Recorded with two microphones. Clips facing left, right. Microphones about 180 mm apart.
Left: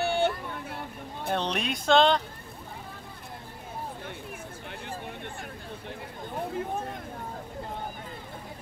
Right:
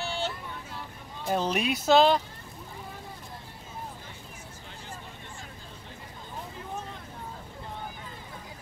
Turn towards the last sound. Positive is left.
turn(degrees=55)  # may be behind; listen again after turning